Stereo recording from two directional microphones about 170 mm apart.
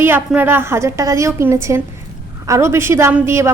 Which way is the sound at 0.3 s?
10° right (ahead or behind).